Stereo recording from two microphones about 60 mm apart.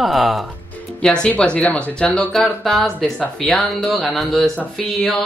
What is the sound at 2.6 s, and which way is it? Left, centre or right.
Speech, centre.